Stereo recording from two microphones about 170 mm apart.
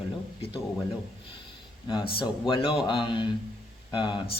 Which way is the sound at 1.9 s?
30° left (ahead or behind).